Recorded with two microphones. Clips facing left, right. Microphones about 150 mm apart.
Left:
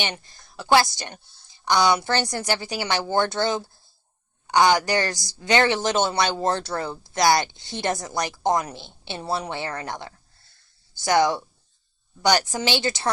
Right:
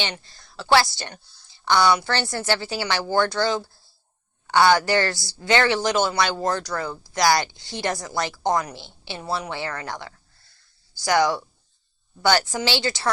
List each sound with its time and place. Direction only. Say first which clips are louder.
0.0 s a woman's voice: even; 20° left (ahead or behind)